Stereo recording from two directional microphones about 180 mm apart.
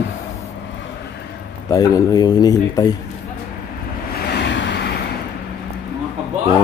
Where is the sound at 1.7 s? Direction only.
20° left (ahead or behind).